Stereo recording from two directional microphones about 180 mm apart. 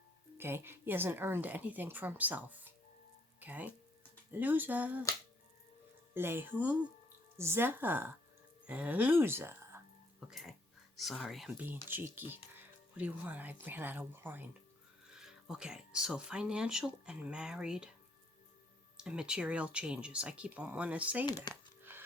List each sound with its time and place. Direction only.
0.3 s speech: 10° right (ahead or behind)
6.1 s speech: 15° right (ahead or behind)
10.2 s speech: centre (ahead or behind)
18.9 s speech: 5° right (ahead or behind)
21.2 s speech: 20° left (ahead or behind)
21.5 s a sound: 10° right (ahead or behind)